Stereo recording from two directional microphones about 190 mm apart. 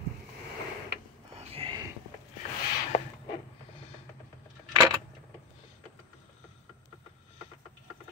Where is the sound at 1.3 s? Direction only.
30° right (ahead or behind).